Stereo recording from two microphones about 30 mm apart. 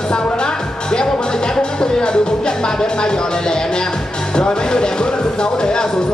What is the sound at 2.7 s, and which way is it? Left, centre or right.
Speech, left.